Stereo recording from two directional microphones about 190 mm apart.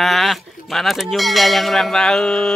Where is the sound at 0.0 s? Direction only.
Centre (ahead or behind).